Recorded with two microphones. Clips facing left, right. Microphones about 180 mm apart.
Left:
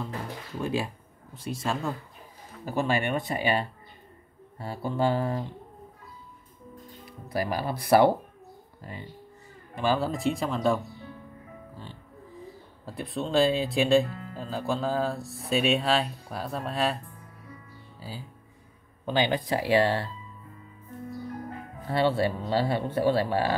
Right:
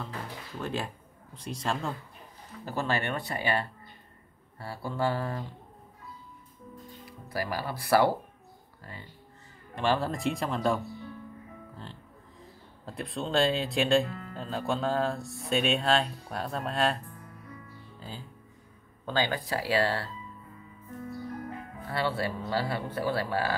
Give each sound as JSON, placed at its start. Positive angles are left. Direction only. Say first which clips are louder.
{"t": 0.6, "sound": "speech", "louder": "left 4 dB", "side_deg": 10}
{"t": 2.6, "sound": "speech", "louder": "left 4 dB", "side_deg": 15}
{"t": 7.1, "sound": "speech", "louder": "left 4 dB", "side_deg": 20}
{"t": 9.8, "sound": "speech", "louder": "left 2 dB", "side_deg": 0}
{"t": 12.8, "sound": "speech", "louder": "left 2 dB", "side_deg": 0}
{"t": 17.9, "sound": "music", "louder": "left 2 dB", "side_deg": 5}
{"t": 19.0, "sound": "speech", "louder": "left 4 dB", "side_deg": 20}
{"t": 21.8, "sound": "speech", "louder": "left 6 dB", "side_deg": 25}